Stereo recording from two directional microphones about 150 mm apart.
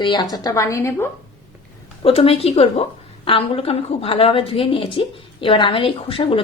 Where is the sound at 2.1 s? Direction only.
40° left (ahead or behind).